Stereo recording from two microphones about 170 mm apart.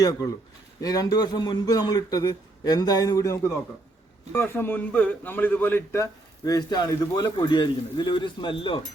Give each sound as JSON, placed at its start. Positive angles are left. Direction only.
{"t": 0.0, "sound": "a man's voice", "side_deg": 20}